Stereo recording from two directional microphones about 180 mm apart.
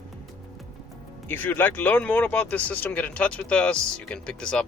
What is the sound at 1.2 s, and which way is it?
Speech, 10° left (ahead or behind).